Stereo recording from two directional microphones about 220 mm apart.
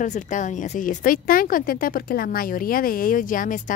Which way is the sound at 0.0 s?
35° left (ahead or behind).